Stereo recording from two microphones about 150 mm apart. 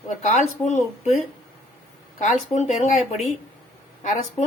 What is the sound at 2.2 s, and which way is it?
Speech, 50° left (ahead or behind).